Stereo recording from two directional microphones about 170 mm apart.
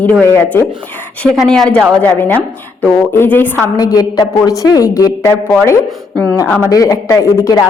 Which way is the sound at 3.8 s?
20° left (ahead or behind).